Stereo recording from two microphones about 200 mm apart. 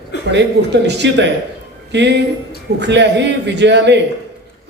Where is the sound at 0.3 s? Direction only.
60° right (ahead or behind).